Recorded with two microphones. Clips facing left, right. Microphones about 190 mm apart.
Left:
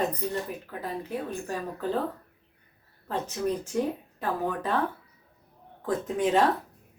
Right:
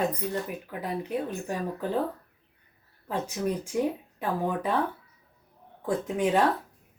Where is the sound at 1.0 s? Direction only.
15° right (ahead or behind).